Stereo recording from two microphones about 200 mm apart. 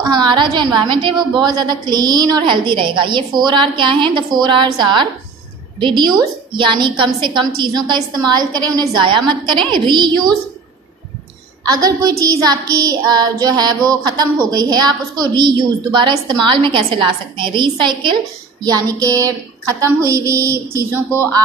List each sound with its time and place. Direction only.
0.1 s child singing: 20° right (ahead or behind)
11.8 s child singing: 15° right (ahead or behind)
18.6 s a woman's voice: 20° right (ahead or behind)